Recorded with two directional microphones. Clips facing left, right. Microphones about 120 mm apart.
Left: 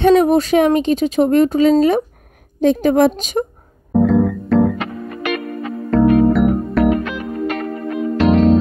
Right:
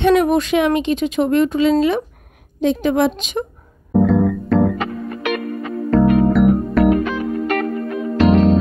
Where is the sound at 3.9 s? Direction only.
Centre (ahead or behind).